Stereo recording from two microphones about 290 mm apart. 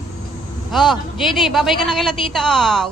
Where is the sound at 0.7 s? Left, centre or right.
Centre.